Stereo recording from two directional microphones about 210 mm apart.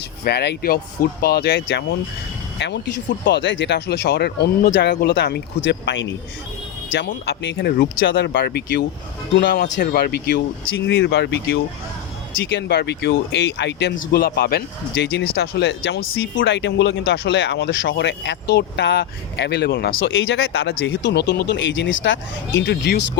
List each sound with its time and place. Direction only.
0.3 s speech: 50° left (ahead or behind)
8.3 s speech: 45° left (ahead or behind)
9.3 s speech: 60° left (ahead or behind)
20.0 s speech: 65° left (ahead or behind)